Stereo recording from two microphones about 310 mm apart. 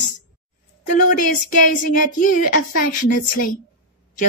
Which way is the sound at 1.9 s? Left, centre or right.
Left.